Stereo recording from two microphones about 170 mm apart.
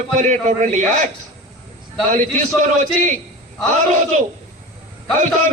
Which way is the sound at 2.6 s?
50° right (ahead or behind).